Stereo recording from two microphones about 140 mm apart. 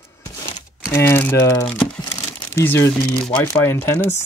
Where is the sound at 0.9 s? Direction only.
15° left (ahead or behind).